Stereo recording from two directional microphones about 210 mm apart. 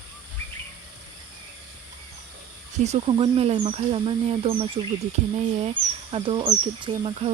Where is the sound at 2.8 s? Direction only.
30° right (ahead or behind).